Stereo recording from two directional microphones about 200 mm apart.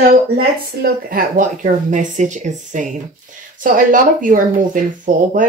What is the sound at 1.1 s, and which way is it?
Speech, 40° right (ahead or behind).